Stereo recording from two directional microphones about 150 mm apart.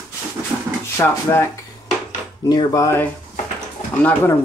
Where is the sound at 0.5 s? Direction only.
10° right (ahead or behind).